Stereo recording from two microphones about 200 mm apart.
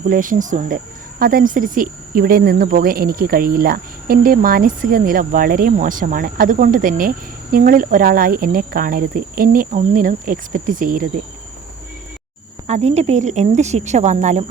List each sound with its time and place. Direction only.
0.1 s speech: 40° right (ahead or behind)
12.6 s speech: 35° right (ahead or behind)